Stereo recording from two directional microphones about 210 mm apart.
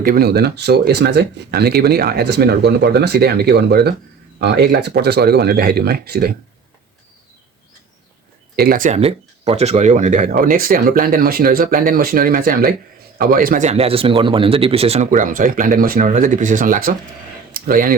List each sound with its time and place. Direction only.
0.0 s speech: 45° right (ahead or behind)
8.5 s speech: 45° right (ahead or behind)
17.5 s a sound: 45° right (ahead or behind)